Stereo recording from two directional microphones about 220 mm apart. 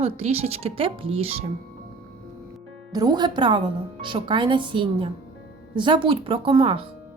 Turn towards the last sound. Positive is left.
turn(degrees=-25)  # may be behind; listen again after turning